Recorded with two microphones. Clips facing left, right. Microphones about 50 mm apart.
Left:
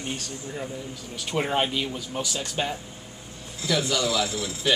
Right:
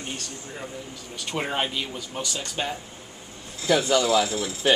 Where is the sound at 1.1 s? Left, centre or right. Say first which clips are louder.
Left 2 dB; centre.